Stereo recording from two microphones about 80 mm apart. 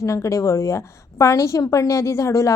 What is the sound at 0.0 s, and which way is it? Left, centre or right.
A woman's voice, left.